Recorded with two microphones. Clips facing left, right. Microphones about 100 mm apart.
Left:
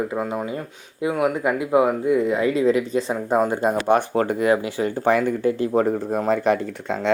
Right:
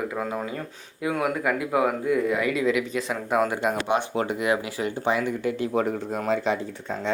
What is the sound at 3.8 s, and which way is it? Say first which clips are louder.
Speech: left 6 dB; 45° left (ahead or behind).